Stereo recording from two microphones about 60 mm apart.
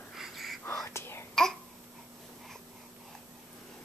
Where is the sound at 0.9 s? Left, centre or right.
Left.